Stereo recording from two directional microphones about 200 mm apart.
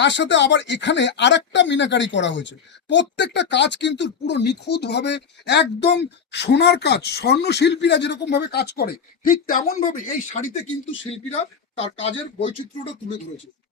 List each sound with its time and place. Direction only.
0.0 s speech: 60° left (ahead or behind); by 10.0 s 40° left (ahead or behind)
11.8 s speech: 30° left (ahead or behind)